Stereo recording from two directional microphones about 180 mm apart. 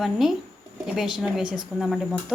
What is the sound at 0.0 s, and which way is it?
Speech, centre (ahead or behind).